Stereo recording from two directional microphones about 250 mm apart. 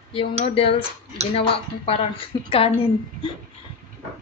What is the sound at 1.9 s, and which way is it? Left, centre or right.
Speech, left.